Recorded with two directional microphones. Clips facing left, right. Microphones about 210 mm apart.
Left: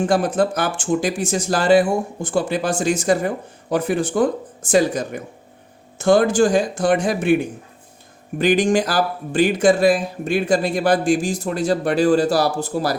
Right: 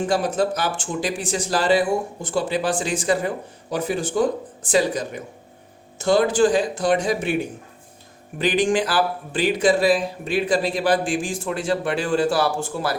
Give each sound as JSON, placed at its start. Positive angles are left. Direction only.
{"t": 0.0, "sound": "speech", "side_deg": 50}
{"t": 8.4, "sound": "speech", "side_deg": 45}